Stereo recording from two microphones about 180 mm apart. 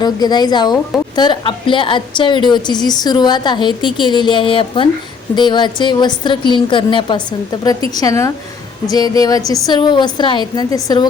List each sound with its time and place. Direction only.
0.0 s a woman's voice: 25° left (ahead or behind)